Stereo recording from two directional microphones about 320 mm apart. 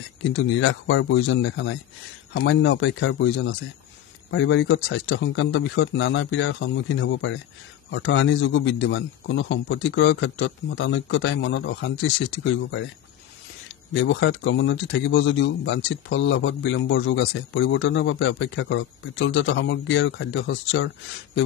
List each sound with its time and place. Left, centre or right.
0.3 s speech: left
14.0 s speech: left